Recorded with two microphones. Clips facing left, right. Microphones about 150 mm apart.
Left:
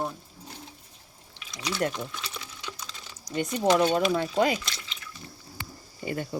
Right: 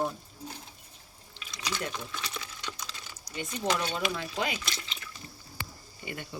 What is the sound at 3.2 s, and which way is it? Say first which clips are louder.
Speech: left 8 dB; 45° left (ahead or behind).